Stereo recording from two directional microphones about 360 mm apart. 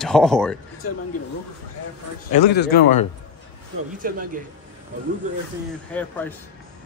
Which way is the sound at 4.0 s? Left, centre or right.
Right.